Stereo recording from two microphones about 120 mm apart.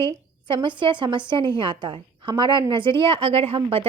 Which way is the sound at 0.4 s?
45° right (ahead or behind).